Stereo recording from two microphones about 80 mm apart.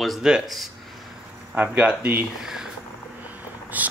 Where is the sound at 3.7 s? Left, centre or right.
Right.